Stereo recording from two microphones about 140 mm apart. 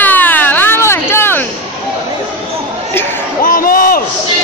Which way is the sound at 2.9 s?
15° left (ahead or behind).